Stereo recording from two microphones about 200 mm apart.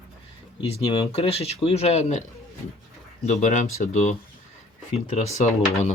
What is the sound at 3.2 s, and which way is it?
Speech, 35° left (ahead or behind).